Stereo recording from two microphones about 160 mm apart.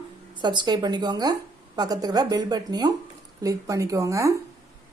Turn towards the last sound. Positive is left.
turn(degrees=-20)  # may be behind; listen again after turning